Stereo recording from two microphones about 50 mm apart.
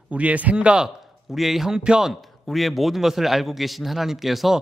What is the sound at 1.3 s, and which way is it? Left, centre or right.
Speech, centre.